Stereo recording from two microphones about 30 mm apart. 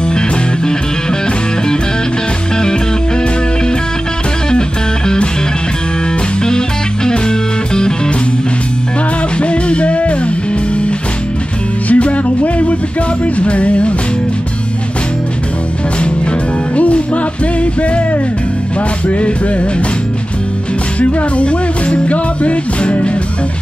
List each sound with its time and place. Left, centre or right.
4.5 s music: left
7.1 s music: left
9.4 s music: left
11.9 s music: left
16.7 s music: left
19.0 s music: left
21.0 s music: left